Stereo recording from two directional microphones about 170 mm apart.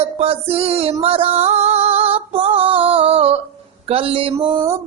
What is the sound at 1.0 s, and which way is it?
Female singing, 35° right (ahead or behind).